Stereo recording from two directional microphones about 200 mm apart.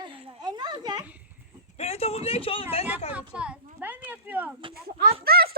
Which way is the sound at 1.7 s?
30° left (ahead or behind).